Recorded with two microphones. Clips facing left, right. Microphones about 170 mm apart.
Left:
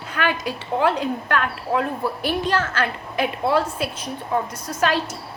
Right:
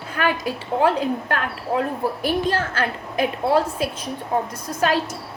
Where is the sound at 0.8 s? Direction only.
35° right (ahead or behind).